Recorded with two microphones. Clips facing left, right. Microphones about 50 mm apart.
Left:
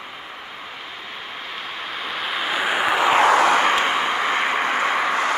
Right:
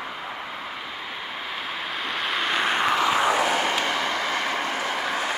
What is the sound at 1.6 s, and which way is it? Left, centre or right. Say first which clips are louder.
Vehicle: left 1 dB; centre.